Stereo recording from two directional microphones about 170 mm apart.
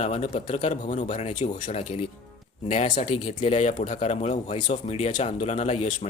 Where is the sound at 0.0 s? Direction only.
40° left (ahead or behind).